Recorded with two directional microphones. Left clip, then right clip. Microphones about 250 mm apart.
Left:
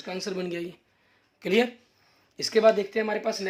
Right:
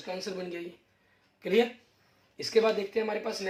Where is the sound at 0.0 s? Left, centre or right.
Left.